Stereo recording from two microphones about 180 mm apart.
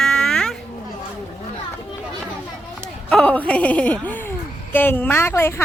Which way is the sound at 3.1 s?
5° left (ahead or behind).